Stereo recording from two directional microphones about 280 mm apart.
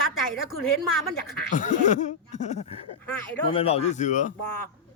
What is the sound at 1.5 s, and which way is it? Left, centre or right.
Speech, left.